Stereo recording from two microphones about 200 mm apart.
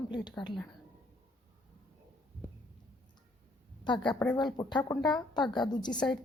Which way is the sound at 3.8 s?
20° left (ahead or behind).